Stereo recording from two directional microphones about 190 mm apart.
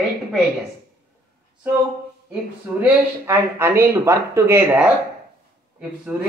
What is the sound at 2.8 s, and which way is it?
Speech, 10° right (ahead or behind).